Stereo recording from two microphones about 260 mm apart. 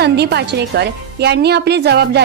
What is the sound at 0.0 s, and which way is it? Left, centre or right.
A woman's voice, right.